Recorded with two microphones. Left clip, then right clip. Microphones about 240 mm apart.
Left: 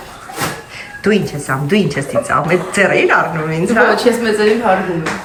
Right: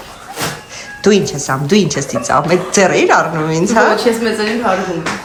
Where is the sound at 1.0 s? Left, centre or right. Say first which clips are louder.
Right 3 dB; centre.